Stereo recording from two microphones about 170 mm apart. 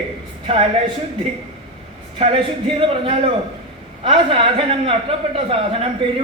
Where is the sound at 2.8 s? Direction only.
35° right (ahead or behind).